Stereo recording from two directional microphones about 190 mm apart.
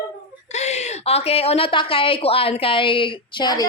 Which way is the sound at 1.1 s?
35° left (ahead or behind).